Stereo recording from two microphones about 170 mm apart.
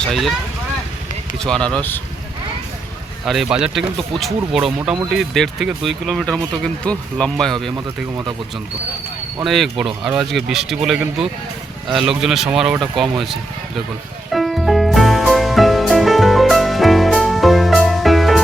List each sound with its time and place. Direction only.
0.0 s speech: centre (ahead or behind)
1.4 s speech: 5° left (ahead or behind)
3.2 s speech: centre (ahead or behind)
4.9 s speech: 5° right (ahead or behind)
8.1 s speech: 25° right (ahead or behind)
9.4 s speech: centre (ahead or behind)
14.3 s music: centre (ahead or behind)